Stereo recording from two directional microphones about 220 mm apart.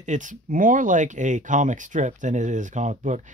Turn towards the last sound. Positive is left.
turn(degrees=-35)  # may be behind; listen again after turning